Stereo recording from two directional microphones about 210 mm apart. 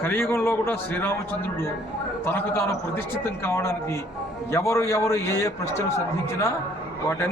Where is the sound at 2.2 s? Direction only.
10° left (ahead or behind).